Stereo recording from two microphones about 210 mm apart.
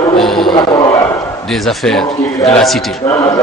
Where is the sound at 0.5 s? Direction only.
20° left (ahead or behind).